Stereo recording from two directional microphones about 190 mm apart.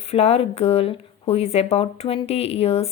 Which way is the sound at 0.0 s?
30° left (ahead or behind).